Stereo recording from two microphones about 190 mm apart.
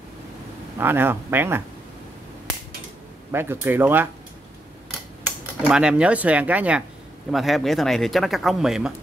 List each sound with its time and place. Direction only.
0.7 s speech: 10° right (ahead or behind)
3.3 s speech: 10° right (ahead or behind)
5.6 s speech: 5° right (ahead or behind)